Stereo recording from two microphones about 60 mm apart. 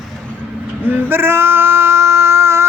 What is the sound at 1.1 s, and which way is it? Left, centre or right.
Speech, right.